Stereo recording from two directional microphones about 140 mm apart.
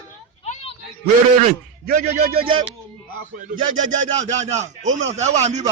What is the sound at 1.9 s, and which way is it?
Speech, 85° right.